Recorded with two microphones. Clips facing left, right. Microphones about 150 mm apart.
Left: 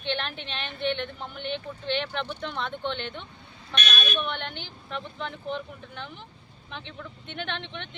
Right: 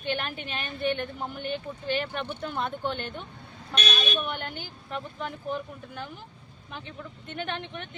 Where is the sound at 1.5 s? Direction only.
5° right (ahead or behind).